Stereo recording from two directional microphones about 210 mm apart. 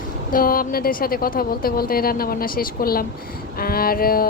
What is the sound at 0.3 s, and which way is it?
Speech, 40° left (ahead or behind).